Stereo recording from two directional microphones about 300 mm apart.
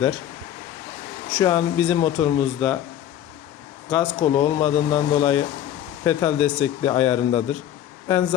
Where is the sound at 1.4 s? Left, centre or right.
Centre.